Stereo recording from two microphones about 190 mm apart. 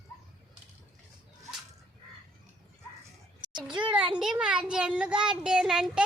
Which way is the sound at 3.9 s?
5° right (ahead or behind).